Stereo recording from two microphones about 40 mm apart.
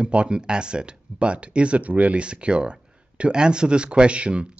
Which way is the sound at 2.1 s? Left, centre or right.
Right.